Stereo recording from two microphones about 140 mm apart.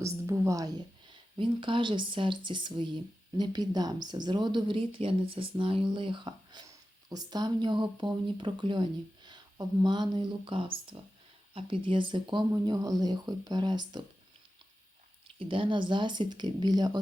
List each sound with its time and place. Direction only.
0.0 s a woman's voice: 20° right (ahead or behind)
15.4 s a woman's voice: 40° right (ahead or behind)